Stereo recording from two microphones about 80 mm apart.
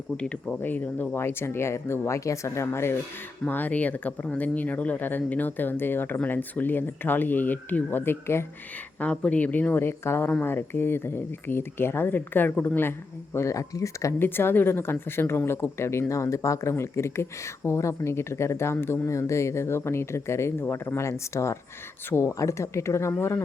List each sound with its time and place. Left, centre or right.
0.2 s speech: centre
0.6 s speech: left
3.5 s speech: left
9.0 s speech: centre
13.3 s speech: left
14.2 s speech: left